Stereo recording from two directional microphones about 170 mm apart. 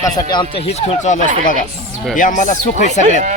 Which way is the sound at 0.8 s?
45° left (ahead or behind).